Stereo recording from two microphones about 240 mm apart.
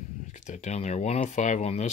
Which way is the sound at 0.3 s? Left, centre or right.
Left.